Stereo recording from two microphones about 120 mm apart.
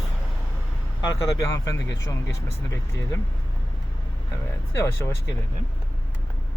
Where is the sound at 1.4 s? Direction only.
30° left (ahead or behind).